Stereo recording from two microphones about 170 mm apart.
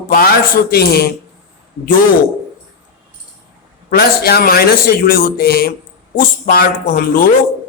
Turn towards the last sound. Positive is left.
turn(degrees=60)  # may be behind; listen again after turning